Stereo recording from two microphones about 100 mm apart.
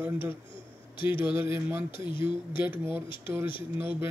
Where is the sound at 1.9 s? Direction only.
55° left (ahead or behind).